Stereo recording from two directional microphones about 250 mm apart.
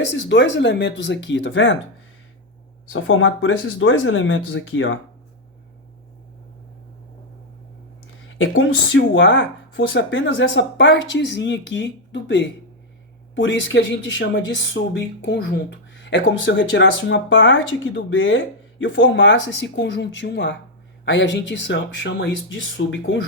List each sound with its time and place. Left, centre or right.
0.1 s speech: left
2.9 s speech: left
8.3 s speech: left